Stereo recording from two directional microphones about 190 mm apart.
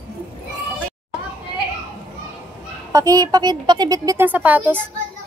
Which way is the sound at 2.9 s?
20° right (ahead or behind).